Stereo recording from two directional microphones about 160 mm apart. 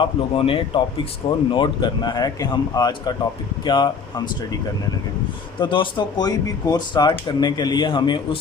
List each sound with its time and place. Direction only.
0.0 s speech: 35° left (ahead or behind)
5.5 s speech: 30° left (ahead or behind)